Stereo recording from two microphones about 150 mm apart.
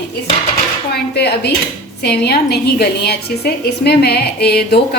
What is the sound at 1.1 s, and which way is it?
A woman's voice, 90° left.